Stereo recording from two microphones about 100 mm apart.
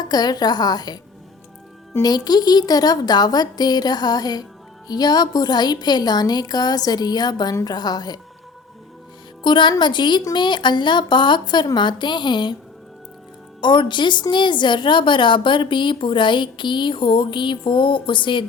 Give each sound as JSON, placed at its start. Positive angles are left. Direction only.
{"t": 0.0, "sound": "a woman's voice", "side_deg": 40}
{"t": 2.0, "sound": "a woman's voice", "side_deg": 40}
{"t": 9.4, "sound": "a woman's voice", "side_deg": 50}
{"t": 13.6, "sound": "a woman's voice", "side_deg": 50}